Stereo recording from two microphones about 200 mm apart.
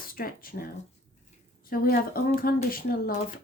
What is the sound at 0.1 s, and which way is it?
Speech, 45° left (ahead or behind).